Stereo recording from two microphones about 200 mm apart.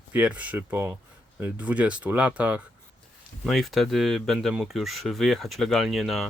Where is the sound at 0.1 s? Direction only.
5° right (ahead or behind).